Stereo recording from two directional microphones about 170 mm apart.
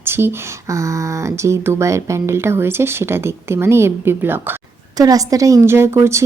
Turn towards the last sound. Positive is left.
turn(degrees=-15)  # may be behind; listen again after turning